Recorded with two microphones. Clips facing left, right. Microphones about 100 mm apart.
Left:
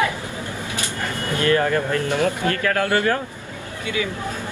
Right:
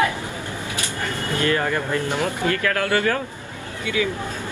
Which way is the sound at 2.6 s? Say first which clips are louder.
Left 3 dB; 20° left (ahead or behind).